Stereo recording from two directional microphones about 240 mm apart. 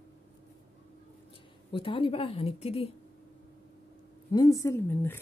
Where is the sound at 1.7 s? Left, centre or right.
Left.